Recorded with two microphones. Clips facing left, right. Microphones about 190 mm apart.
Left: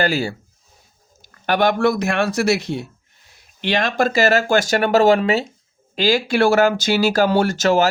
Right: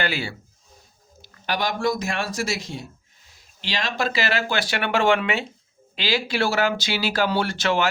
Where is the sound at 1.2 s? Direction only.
55° left (ahead or behind).